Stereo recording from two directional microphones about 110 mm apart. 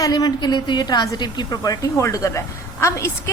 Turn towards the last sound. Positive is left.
turn(degrees=25)  # may be behind; listen again after turning